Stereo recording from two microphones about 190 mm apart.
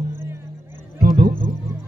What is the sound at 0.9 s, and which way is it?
Music, 55° right (ahead or behind).